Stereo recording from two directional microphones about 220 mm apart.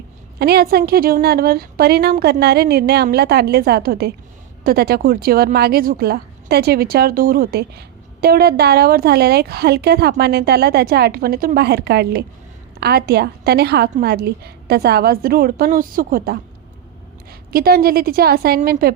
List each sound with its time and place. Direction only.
0.3 s speech: 45° right (ahead or behind)
17.5 s speech: 40° right (ahead or behind)